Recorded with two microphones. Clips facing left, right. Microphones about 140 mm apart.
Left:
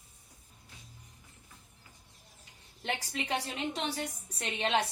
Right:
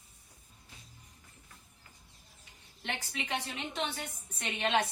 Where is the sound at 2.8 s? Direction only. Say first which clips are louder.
Left 3 dB; 35° left (ahead or behind).